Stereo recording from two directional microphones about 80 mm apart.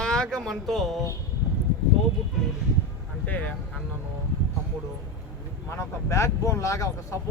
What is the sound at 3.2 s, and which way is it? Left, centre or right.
Speech, centre.